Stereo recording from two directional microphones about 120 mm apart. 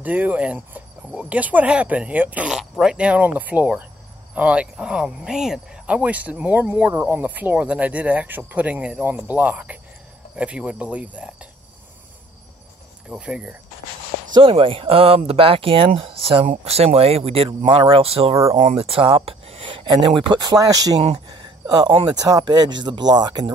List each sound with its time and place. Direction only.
0.0 s speech: 15° right (ahead or behind)
13.1 s speech: 5° right (ahead or behind)
14.3 s speech: 45° right (ahead or behind); by 21.0 s 30° right (ahead or behind)
21.0 s speech: 50° right (ahead or behind)
21.6 s speech: 35° right (ahead or behind)